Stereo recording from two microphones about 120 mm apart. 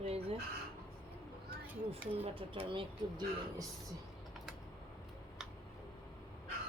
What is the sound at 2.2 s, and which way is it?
Speech, 50° right (ahead or behind).